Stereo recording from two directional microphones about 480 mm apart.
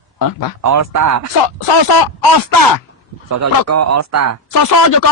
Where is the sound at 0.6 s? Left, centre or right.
Right.